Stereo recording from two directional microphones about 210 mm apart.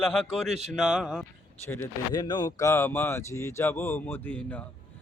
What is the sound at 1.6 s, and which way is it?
Speech, 10° left (ahead or behind).